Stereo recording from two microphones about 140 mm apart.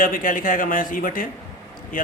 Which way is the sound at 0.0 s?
80° left.